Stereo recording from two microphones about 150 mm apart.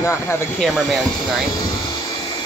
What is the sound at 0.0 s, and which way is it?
Speech, 15° left (ahead or behind).